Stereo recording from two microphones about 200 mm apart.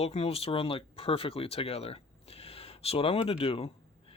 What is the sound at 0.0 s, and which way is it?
Speech, 30° left (ahead or behind).